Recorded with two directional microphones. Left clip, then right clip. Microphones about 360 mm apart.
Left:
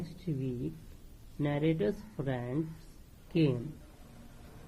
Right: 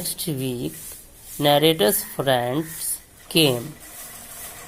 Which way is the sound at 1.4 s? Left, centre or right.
Centre.